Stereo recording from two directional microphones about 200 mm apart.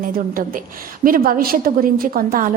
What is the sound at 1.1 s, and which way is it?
A woman's voice, 45° right (ahead or behind).